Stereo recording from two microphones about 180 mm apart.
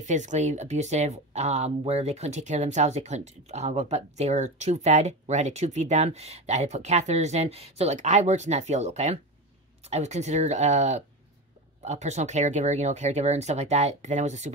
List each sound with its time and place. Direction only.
0.0 s speech: 40° right (ahead or behind)